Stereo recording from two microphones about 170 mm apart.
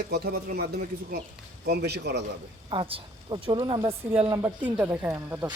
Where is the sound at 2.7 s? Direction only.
30° right (ahead or behind).